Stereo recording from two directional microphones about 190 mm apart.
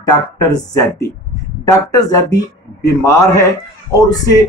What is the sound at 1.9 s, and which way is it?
Speech, 20° left (ahead or behind).